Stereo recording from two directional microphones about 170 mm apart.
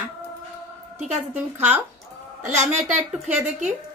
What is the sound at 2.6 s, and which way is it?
Speech, 45° right (ahead or behind).